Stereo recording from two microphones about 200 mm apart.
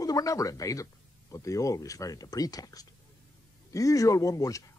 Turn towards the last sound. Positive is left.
turn(degrees=15)  # may be behind; listen again after turning